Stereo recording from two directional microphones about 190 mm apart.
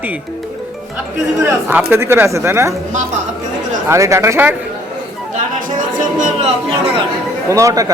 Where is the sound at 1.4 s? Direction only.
15° right (ahead or behind).